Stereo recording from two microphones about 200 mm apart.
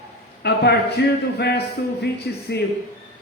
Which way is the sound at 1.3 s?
55° left (ahead or behind).